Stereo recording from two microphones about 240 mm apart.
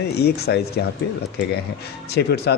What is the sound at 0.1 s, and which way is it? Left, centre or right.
Speech, left.